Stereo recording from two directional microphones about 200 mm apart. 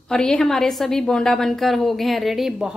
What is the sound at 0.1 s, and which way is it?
A woman's voice, 5° left (ahead or behind).